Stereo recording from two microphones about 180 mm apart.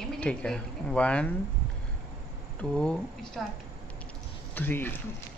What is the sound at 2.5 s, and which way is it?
Speech, 5° left (ahead or behind).